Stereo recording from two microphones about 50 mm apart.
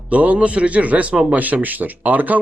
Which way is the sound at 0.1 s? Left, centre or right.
Right.